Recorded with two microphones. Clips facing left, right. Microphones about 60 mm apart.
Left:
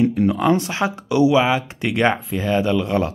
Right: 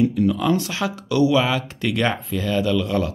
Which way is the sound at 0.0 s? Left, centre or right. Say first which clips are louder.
Left 2 dB; left.